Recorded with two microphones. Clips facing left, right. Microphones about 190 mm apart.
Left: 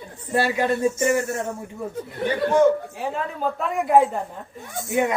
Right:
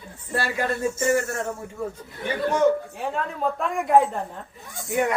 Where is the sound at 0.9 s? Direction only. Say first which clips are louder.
Left 1 dB; 10° left (ahead or behind).